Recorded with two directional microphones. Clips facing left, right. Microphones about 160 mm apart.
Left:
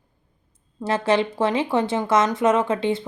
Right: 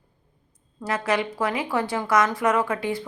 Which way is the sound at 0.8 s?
25° left (ahead or behind).